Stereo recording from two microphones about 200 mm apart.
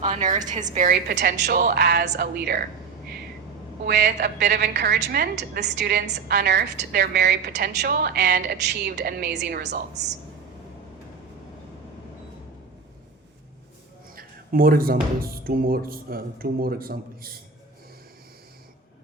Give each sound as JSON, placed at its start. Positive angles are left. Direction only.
{"t": 0.0, "sound": "a woman's voice", "side_deg": -35}
{"t": 3.8, "sound": "a woman's voice", "side_deg": -55}
{"t": 14.2, "sound": "a sound", "side_deg": -45}
{"t": 15.2, "sound": "speech", "side_deg": -50}